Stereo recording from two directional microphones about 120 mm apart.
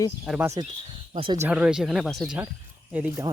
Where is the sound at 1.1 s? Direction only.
45° right (ahead or behind).